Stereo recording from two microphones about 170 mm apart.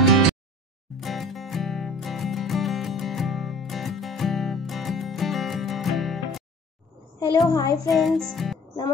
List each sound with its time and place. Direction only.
0.8 s music: centre (ahead or behind)
7.2 s a woman's voice: 25° left (ahead or behind)
7.9 s music: centre (ahead or behind)